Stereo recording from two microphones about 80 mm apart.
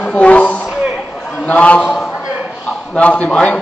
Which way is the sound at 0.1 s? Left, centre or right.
Centre.